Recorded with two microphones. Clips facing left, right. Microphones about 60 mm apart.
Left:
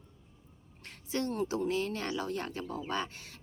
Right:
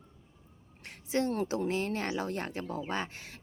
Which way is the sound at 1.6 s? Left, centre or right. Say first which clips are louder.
Right 1 dB; right.